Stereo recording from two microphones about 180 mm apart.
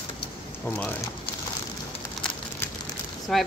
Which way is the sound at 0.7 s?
10° left (ahead or behind).